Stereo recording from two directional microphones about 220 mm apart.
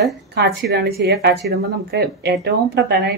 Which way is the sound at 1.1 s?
50° right (ahead or behind).